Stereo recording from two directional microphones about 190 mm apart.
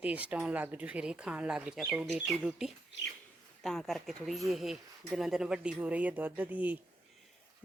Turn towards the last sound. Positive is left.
turn(degrees=-10)  # may be behind; listen again after turning